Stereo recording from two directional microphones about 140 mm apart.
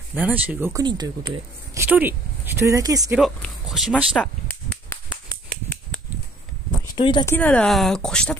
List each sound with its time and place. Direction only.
0.1 s speech: 10° right (ahead or behind)
0.8 s speech: 30° right (ahead or behind)
1.8 s speech: 15° right (ahead or behind)
3.6 s a sound: centre (ahead or behind)
4.2 s a sound: 10° left (ahead or behind)
7.0 s speech: 35° left (ahead or behind)
7.2 s speech: 10° left (ahead or behind)